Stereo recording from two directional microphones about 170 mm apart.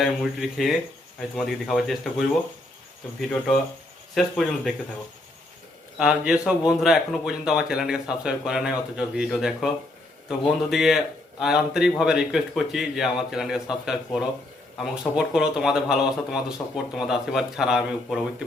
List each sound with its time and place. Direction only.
0.5 s a man's voice: centre (ahead or behind)
6.0 s a man's voice: 5° right (ahead or behind)